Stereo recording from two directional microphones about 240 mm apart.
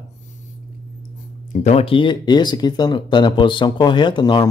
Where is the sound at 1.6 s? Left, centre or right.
Left.